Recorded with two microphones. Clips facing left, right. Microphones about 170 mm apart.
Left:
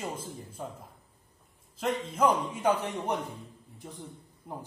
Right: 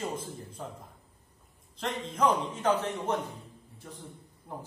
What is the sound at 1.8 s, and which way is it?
A man's voice, 10° left (ahead or behind).